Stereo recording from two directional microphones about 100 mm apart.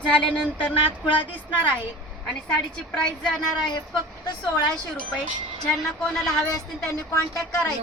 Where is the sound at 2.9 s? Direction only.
10° left (ahead or behind).